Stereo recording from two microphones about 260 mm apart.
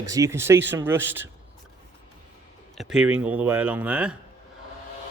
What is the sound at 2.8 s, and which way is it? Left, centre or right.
Speech, centre.